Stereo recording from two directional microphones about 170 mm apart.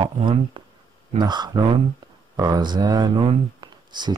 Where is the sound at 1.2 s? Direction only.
25° right (ahead or behind).